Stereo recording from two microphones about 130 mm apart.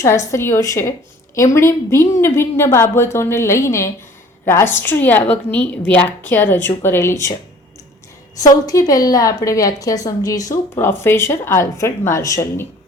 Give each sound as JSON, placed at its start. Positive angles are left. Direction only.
{"t": 0.0, "sound": "a woman's voice", "side_deg": 25}
{"t": 8.6, "sound": "a woman's voice", "side_deg": 25}